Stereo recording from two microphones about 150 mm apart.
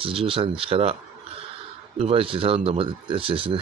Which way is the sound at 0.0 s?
35° right (ahead or behind).